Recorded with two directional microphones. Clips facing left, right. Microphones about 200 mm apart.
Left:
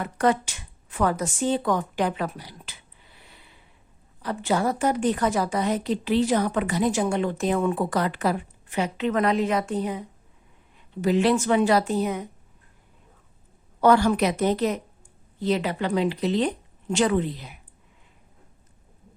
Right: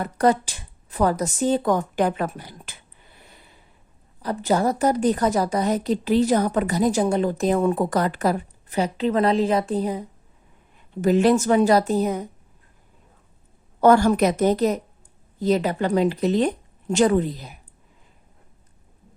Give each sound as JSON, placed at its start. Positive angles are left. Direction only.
{"t": 0.0, "sound": "a woman's voice", "side_deg": -35}
{"t": 11.0, "sound": "a woman's voice", "side_deg": -45}
{"t": 13.8, "sound": "speech", "side_deg": -45}